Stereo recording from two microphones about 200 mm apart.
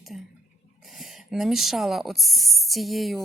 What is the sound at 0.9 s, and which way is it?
Speech, centre (ahead or behind).